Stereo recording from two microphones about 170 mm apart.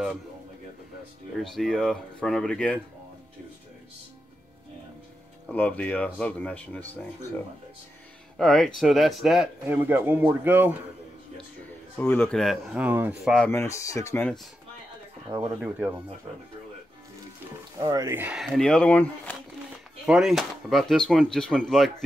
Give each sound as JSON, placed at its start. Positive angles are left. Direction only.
{"t": 1.4, "sound": "a man's voice", "side_deg": 0}
{"t": 5.5, "sound": "speech", "side_deg": 10}
{"t": 8.4, "sound": "a man's voice", "side_deg": 0}
{"t": 12.0, "sound": "a man's voice", "side_deg": 10}
{"t": 13.5, "sound": "speech", "side_deg": 15}
{"t": 15.2, "sound": "speech", "side_deg": -20}
{"t": 17.7, "sound": "speech", "side_deg": -20}
{"t": 18.4, "sound": "a man's voice", "side_deg": 5}
{"t": 20.1, "sound": "a man's voice", "side_deg": 0}